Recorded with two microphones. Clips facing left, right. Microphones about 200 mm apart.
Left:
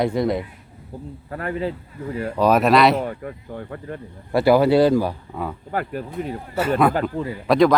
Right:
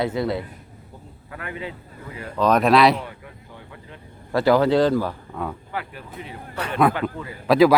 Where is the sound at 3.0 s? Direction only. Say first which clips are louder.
Left 9 dB; 50° left (ahead or behind).